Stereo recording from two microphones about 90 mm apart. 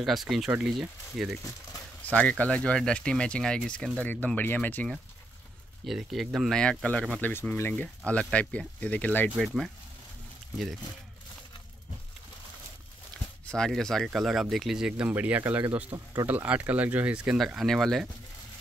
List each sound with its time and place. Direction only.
0.0 s speech: centre (ahead or behind)
2.0 s speech: 15° left (ahead or behind)
5.9 s speech: 5° right (ahead or behind)
6.6 s speech: 10° left (ahead or behind); by 7.7 s 25° left (ahead or behind)
7.7 s speech: 15° left (ahead or behind)
13.5 s speech: 5° left (ahead or behind); by 15.6 s 20° right (ahead or behind)
15.9 s speech: 45° right (ahead or behind)
16.3 s speech: 15° right (ahead or behind)
17.4 s speech: centre (ahead or behind)